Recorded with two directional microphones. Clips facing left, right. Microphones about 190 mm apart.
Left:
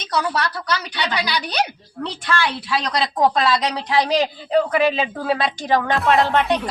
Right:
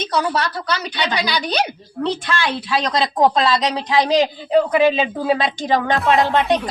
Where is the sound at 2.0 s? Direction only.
20° right (ahead or behind).